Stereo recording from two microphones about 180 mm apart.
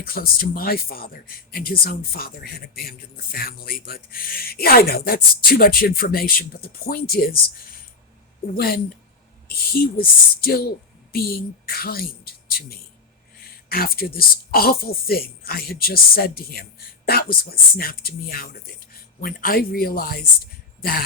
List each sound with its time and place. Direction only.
0.0 s speech: 55° left (ahead or behind)
8.5 s a woman's voice: 55° left (ahead or behind)